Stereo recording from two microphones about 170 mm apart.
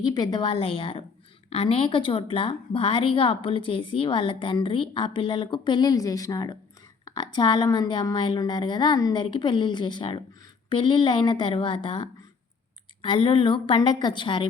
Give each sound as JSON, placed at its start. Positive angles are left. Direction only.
{"t": 0.0, "sound": "a woman's voice", "side_deg": 25}